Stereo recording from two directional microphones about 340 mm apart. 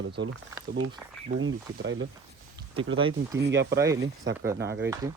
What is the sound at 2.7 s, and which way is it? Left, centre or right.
Speech, centre.